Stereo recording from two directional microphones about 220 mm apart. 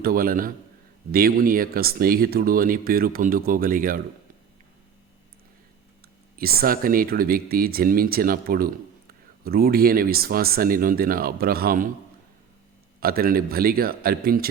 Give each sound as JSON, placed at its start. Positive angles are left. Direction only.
{"t": 0.0, "sound": "speech", "side_deg": -40}
{"t": 6.3, "sound": "speech", "side_deg": -45}
{"t": 13.0, "sound": "speech", "side_deg": -45}